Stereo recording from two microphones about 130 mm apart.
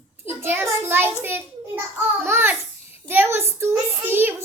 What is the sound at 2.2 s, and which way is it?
Speech, 15° right (ahead or behind).